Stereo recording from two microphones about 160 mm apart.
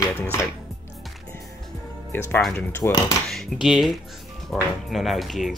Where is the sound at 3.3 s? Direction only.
Centre (ahead or behind).